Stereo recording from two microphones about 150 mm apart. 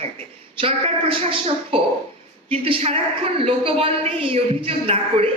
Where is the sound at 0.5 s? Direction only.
35° right (ahead or behind).